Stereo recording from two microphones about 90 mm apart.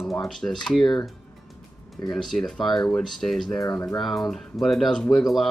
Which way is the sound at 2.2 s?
5° left (ahead or behind).